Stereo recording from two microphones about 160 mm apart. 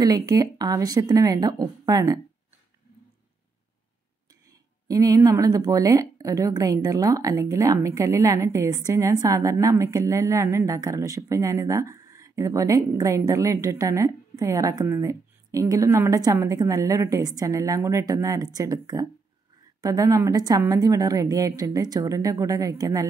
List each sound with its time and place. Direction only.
0.0 s speech: 25° right (ahead or behind)
4.8 s speech: 20° right (ahead or behind)